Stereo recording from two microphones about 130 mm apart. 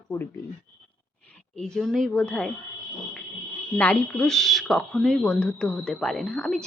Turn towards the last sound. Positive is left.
turn(degrees=5)  # may be behind; listen again after turning